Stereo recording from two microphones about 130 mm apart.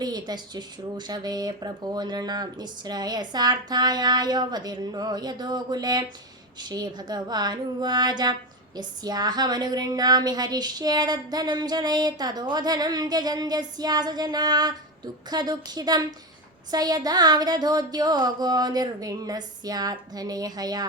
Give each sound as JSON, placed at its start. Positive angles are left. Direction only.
{"t": 0.0, "sound": "a woman's voice", "side_deg": -35}